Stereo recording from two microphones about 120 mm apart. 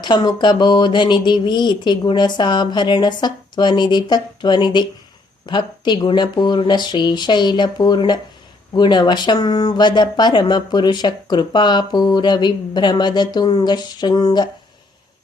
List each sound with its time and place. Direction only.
0.0 s speech: 40° left (ahead or behind)